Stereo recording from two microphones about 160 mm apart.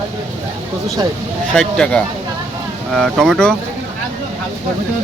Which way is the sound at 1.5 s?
5° left (ahead or behind).